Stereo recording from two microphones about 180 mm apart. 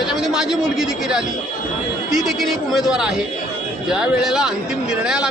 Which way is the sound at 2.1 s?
Centre (ahead or behind).